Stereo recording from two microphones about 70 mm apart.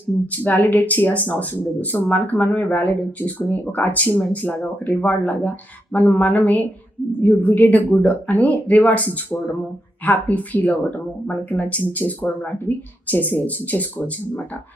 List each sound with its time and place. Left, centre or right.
0.3 s speech: left